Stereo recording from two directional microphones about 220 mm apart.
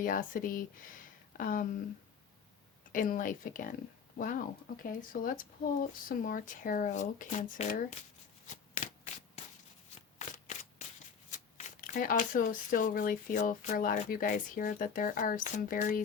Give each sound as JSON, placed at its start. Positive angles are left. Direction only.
{"t": 0.0, "sound": "speech", "side_deg": 40}
{"t": 2.9, "sound": "speech", "side_deg": 35}
{"t": 10.2, "sound": "shuffling cards", "side_deg": 35}
{"t": 11.3, "sound": "speech", "side_deg": 35}